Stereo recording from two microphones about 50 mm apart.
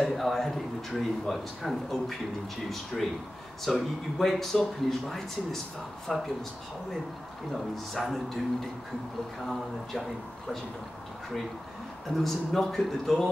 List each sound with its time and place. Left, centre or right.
0.0 s speech: centre
7.5 s speech: centre
9.4 s speech: centre
12.2 s speech: centre